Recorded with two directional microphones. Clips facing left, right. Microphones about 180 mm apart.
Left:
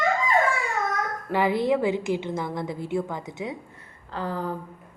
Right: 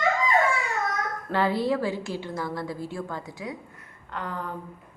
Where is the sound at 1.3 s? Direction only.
15° left (ahead or behind).